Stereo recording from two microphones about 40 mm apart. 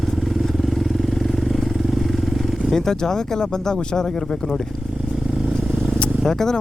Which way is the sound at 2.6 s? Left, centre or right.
Centre.